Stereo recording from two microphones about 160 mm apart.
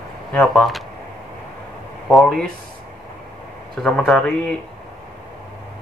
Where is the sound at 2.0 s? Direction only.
Centre (ahead or behind).